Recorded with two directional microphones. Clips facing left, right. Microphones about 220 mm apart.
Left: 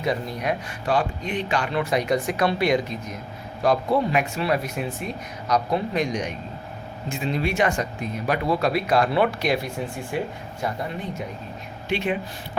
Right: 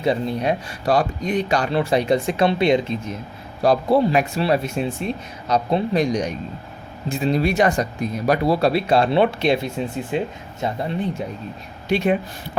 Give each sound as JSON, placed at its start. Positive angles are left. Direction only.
{"t": 0.0, "sound": "speech", "side_deg": -30}
{"t": 11.9, "sound": "speech", "side_deg": -40}